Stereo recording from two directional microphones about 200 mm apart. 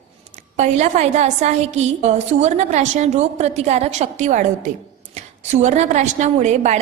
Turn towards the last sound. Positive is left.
turn(degrees=-35)  # may be behind; listen again after turning